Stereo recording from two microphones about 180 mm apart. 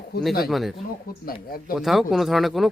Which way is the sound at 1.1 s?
50° left (ahead or behind).